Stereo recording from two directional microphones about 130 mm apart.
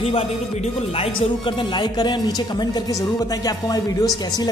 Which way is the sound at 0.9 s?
45° left (ahead or behind).